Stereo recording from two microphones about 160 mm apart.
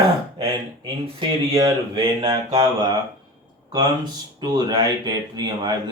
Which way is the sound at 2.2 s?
25° right (ahead or behind).